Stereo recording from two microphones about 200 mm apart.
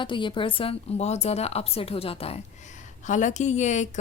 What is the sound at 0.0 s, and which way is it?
A woman's voice, 25° left (ahead or behind).